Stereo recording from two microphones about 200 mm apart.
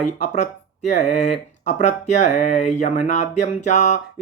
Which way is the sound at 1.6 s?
35° left (ahead or behind).